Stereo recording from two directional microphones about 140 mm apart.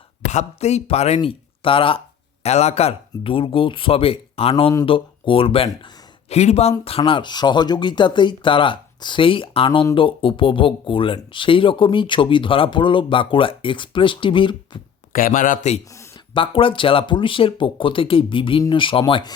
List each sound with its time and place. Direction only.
0.3 s speech: 55° left (ahead or behind)
2.4 s speech: 50° left (ahead or behind); by 14.8 s 35° left (ahead or behind)
15.1 s a man's voice: 85° left
16.3 s speech: 40° left (ahead or behind)